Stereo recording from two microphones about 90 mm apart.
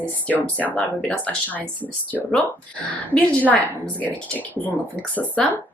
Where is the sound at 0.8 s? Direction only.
5° left (ahead or behind).